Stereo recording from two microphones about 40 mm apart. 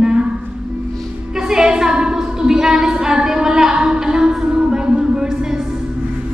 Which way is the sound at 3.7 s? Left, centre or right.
Right.